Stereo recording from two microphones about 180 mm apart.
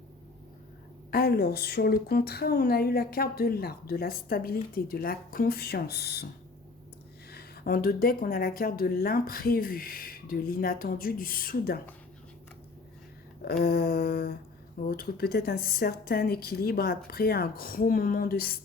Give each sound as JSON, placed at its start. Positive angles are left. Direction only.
{"t": 1.1, "sound": "a woman's voice", "side_deg": 60}
{"t": 7.3, "sound": "a woman's voice", "side_deg": 60}
{"t": 13.4, "sound": "a woman's voice", "side_deg": 55}